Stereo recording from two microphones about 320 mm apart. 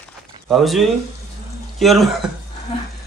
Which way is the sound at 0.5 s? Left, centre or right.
Centre.